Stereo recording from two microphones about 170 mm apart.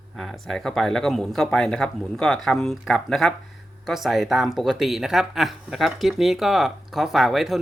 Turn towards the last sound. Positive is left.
turn(degrees=0)  # may be behind; listen again after turning